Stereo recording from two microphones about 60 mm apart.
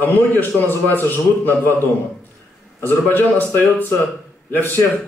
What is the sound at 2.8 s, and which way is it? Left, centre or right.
A man's voice, left.